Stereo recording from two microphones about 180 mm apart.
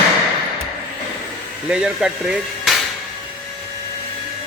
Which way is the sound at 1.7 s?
5° right (ahead or behind).